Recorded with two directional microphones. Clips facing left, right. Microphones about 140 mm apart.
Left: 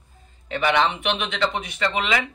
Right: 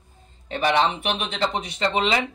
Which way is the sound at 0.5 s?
35° right (ahead or behind).